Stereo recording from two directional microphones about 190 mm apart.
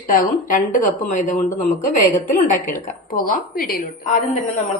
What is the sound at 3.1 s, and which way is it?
Speech, 50° left (ahead or behind).